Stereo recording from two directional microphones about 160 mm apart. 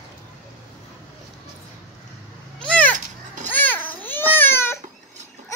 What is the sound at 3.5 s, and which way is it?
Babbling, 10° left (ahead or behind).